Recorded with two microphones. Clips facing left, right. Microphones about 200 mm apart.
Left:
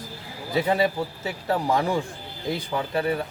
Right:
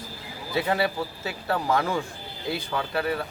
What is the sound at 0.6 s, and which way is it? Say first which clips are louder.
A man's voice: left 3 dB; 15° left (ahead or behind).